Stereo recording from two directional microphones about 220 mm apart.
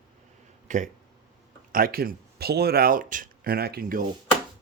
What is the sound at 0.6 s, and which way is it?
Speech, 35° right (ahead or behind).